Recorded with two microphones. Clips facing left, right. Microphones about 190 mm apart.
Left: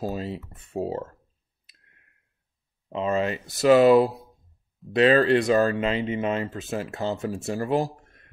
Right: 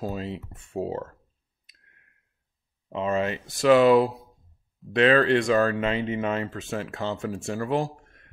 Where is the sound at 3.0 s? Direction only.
35° left (ahead or behind).